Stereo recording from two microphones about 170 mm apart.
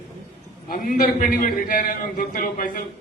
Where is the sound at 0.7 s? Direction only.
55° left (ahead or behind).